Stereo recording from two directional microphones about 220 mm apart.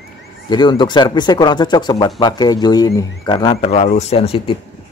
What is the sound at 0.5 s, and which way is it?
Speech, 20° left (ahead or behind).